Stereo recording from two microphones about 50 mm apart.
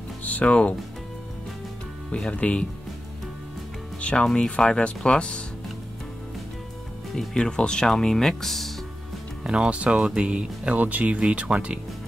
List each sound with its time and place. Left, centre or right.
0.2 s speech: left
2.3 s speech: left
4.0 s speech: centre
7.2 s speech: centre
9.4 s speech: centre